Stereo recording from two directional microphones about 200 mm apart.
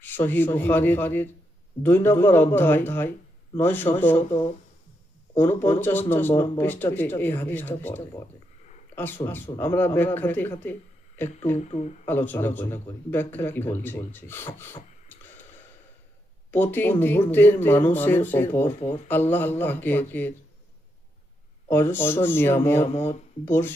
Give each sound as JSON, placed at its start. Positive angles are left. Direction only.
{"t": 0.0, "sound": "a man's voice", "side_deg": 10}
{"t": 5.4, "sound": "a man's voice", "side_deg": 10}
{"t": 11.5, "sound": "speech", "side_deg": 35}
{"t": 12.0, "sound": "a man's voice", "side_deg": 10}
{"t": 16.5, "sound": "a man's voice", "side_deg": 10}
{"t": 21.7, "sound": "a man's voice", "side_deg": 10}